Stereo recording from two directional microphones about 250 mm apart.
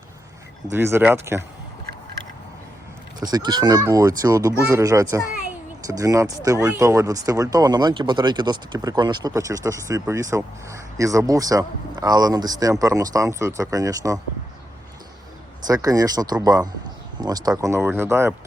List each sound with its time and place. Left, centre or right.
0.7 s speech: centre
3.2 s speech: centre
15.6 s speech: centre